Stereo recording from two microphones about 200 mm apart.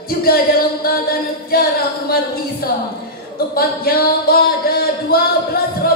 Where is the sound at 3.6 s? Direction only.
50° left (ahead or behind).